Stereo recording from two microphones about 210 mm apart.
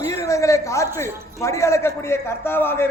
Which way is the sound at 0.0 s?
15° left (ahead or behind).